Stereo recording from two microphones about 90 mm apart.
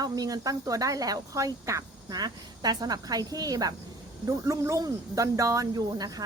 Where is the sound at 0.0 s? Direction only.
45° right (ahead or behind).